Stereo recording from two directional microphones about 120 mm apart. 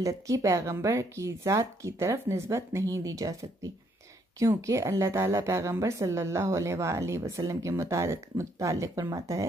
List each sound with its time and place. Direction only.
0.0 s a woman's voice: 25° right (ahead or behind)